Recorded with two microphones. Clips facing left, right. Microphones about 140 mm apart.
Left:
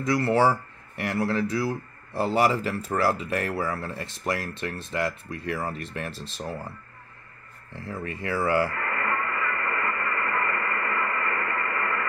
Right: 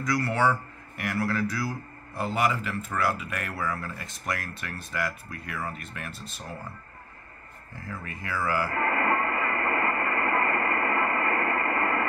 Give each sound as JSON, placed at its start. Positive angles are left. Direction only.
{"t": 0.0, "sound": "speech", "side_deg": 25}
{"t": 7.7, "sound": "speech", "side_deg": 30}
{"t": 8.7, "sound": "radio", "side_deg": -30}